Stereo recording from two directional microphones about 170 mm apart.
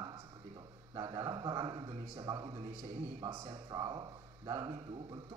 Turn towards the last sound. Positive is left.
turn(degrees=-20)  # may be behind; listen again after turning